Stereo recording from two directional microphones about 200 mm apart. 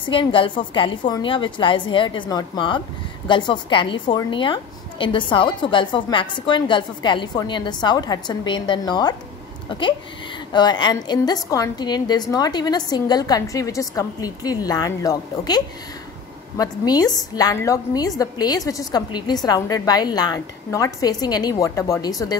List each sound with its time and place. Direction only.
0.1 s a woman's voice: 25° left (ahead or behind)